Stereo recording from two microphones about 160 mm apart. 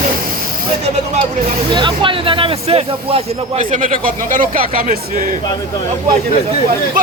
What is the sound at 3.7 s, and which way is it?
Speech, 55° right (ahead or behind).